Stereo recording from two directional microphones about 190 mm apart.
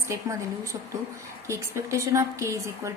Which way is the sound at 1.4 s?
15° right (ahead or behind).